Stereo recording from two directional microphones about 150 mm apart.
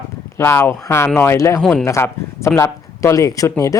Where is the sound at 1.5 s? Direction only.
5° left (ahead or behind).